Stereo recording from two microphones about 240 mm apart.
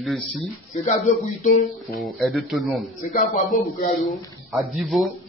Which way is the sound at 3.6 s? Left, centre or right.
Left.